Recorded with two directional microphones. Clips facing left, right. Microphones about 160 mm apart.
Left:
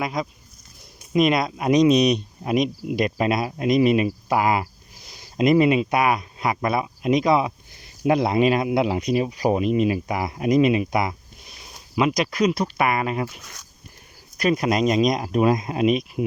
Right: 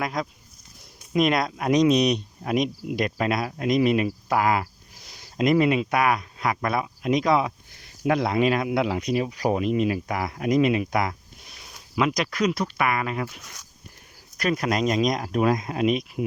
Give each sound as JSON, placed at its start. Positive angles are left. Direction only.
{"t": 0.0, "sound": "speech", "side_deg": 5}
{"t": 14.3, "sound": "speech", "side_deg": 15}